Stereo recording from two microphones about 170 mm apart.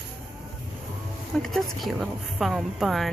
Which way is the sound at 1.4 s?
Centre (ahead or behind).